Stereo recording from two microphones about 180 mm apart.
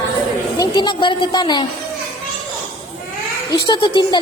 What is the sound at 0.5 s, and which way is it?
A woman's voice, 25° left (ahead or behind).